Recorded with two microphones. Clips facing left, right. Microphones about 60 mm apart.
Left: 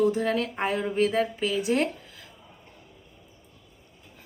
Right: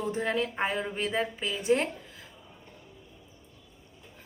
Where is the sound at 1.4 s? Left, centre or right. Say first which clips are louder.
Right 1 dB; right.